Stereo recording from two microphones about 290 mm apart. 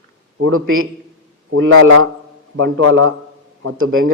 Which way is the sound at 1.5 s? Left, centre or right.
Right.